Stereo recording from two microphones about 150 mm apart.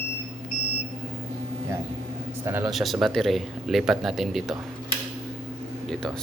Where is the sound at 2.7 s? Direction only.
Centre (ahead or behind).